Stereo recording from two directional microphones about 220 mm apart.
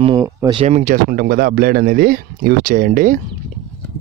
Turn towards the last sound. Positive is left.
turn(degrees=-35)  # may be behind; listen again after turning